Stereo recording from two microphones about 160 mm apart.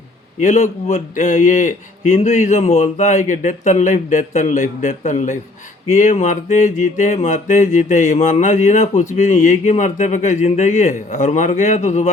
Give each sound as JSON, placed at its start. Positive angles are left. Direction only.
{"t": 0.3, "sound": "mantra", "side_deg": 50}